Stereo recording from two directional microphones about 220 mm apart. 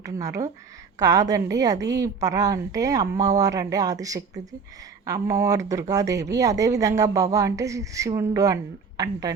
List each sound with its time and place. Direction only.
0.0 s a woman's voice: 15° right (ahead or behind)